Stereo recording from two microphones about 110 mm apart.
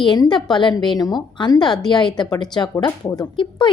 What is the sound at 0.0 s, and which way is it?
Speech, 40° left (ahead or behind).